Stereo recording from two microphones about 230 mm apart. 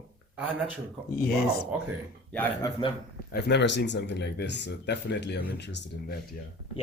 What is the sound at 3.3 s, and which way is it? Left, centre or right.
Speech, left.